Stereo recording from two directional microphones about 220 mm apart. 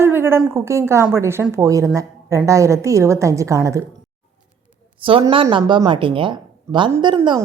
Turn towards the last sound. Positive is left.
turn(degrees=-20)  # may be behind; listen again after turning